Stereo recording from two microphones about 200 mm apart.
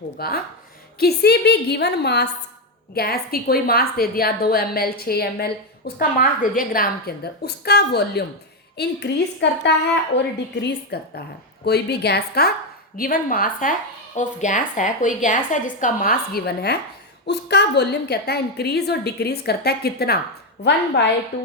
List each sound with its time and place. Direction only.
0.2 s a woman's voice: 50° left (ahead or behind)